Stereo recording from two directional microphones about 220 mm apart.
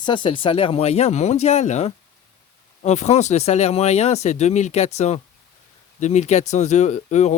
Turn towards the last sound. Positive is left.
turn(degrees=30)  # may be behind; listen again after turning